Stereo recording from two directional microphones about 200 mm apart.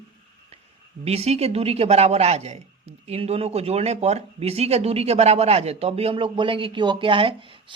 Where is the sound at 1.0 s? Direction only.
30° right (ahead or behind).